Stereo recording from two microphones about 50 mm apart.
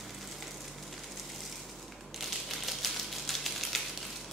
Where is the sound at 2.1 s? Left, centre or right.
Centre.